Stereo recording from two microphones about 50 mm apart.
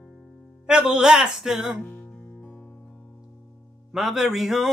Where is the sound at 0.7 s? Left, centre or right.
Centre.